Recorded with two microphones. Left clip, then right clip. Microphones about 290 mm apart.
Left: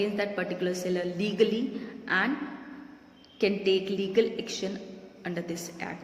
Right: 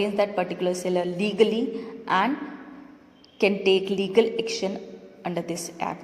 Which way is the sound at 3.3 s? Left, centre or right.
Centre.